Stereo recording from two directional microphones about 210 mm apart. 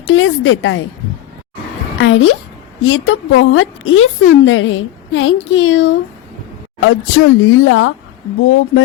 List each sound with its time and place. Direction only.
0.1 s a woman's voice: 70° left (ahead or behind)
2.0 s a woman's voice: 70° left (ahead or behind)